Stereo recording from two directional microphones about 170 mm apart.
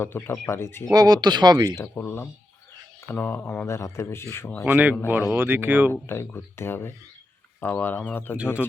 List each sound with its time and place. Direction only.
0.3 s speech: 15° left (ahead or behind)
0.9 s speech: 25° right (ahead or behind)
1.7 s speech: 15° left (ahead or behind)
4.6 s speech: 10° right (ahead or behind)
5.9 s speech: 15° left (ahead or behind)